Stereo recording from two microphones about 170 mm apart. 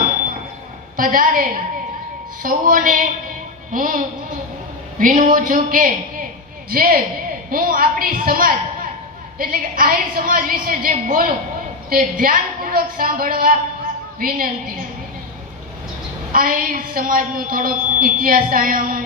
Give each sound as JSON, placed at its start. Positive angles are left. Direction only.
{"t": 0.9, "sound": "a woman's voice", "side_deg": -55}
{"t": 16.3, "sound": "a woman's voice", "side_deg": -55}